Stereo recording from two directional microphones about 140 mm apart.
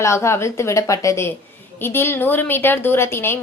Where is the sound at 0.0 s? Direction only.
20° left (ahead or behind).